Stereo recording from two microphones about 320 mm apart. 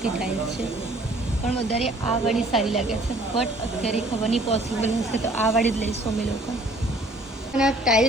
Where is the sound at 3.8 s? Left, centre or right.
Centre.